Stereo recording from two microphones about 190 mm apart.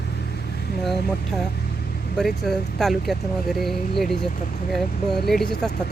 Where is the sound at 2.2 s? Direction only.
Centre (ahead or behind).